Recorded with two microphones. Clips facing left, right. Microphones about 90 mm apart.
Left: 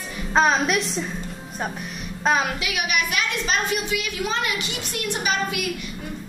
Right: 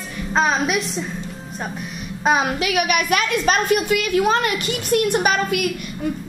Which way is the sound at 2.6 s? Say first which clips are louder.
Right 6 dB; 55° right (ahead or behind).